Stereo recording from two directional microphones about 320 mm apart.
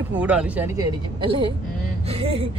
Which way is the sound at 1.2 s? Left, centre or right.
Centre.